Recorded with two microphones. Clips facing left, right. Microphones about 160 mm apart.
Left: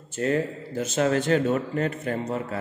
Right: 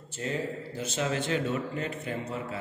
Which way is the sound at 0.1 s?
55° left (ahead or behind).